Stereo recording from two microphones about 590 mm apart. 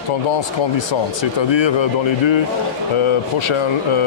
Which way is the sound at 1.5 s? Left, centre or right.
Left.